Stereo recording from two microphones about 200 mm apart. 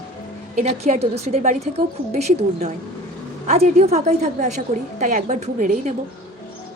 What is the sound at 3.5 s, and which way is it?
A woman's voice, 30° right (ahead or behind).